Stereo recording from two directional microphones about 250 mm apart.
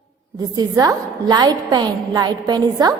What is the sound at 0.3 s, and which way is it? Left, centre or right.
A woman's voice, centre.